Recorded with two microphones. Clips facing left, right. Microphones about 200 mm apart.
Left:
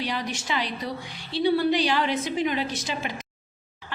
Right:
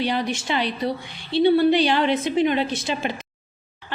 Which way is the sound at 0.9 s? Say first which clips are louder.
Right 6 dB; 25° right (ahead or behind).